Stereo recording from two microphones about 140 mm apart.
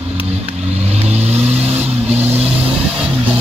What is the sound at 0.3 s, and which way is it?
Vehicle, 50° right (ahead or behind).